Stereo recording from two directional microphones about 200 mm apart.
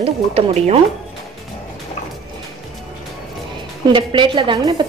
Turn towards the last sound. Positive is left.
turn(degrees=-25)  # may be behind; listen again after turning